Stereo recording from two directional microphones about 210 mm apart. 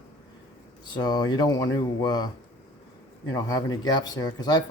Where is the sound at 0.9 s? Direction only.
20° left (ahead or behind).